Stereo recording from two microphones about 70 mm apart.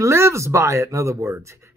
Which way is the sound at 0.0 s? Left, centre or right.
Right.